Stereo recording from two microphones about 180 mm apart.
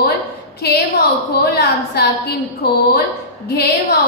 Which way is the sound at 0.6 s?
65° left (ahead or behind).